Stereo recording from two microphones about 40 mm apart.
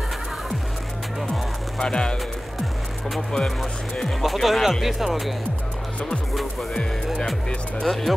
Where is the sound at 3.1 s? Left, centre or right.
Centre.